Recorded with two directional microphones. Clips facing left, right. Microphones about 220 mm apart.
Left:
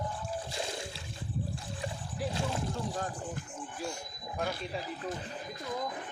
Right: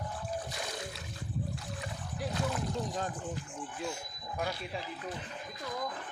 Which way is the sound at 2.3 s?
25° left (ahead or behind).